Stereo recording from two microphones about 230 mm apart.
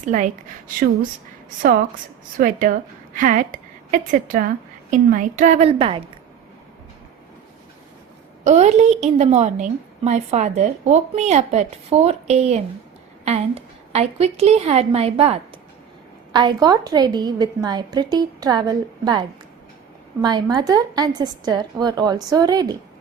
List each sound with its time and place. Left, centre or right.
0.0 s a woman's voice: right
2.4 s a woman's voice: right
8.4 s a woman's voice: right
20.2 s a woman's voice: centre